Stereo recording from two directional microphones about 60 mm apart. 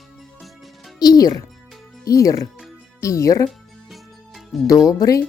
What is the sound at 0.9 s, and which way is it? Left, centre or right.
Speech, left.